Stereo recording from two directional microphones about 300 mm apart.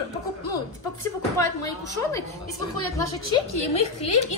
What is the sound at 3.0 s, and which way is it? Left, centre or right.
A woman's voice, centre.